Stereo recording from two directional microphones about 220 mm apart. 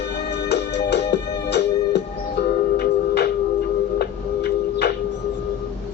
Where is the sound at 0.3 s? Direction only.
50° left (ahead or behind).